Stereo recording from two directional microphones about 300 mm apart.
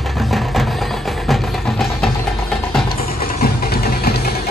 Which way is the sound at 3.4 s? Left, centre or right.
Left.